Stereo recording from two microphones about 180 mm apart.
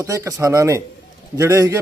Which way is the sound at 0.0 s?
20° right (ahead or behind).